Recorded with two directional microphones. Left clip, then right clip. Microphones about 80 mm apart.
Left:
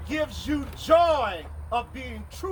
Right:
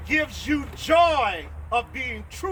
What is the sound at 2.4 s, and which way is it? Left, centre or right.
Speech, right.